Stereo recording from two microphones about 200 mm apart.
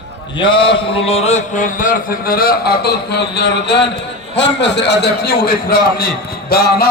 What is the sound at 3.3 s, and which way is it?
A man's voice, 55° left (ahead or behind).